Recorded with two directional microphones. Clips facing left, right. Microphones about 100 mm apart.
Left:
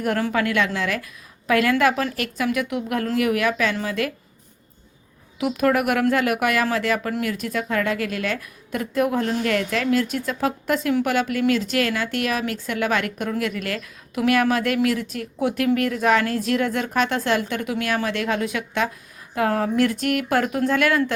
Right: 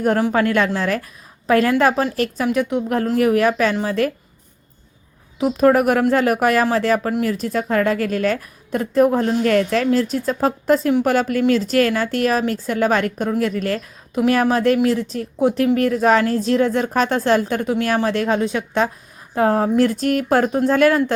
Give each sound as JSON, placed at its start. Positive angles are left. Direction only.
{"t": 0.3, "sound": "a woman's voice", "side_deg": -40}
{"t": 5.4, "sound": "a woman's voice", "side_deg": -30}